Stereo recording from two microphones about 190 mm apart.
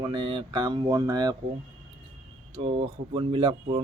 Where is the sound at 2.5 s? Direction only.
30° right (ahead or behind).